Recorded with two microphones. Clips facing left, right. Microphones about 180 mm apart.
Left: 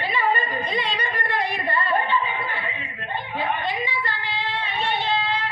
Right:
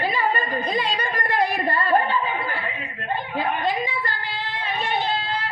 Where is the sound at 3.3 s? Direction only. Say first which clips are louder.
Right 2 dB; 45° right (ahead or behind).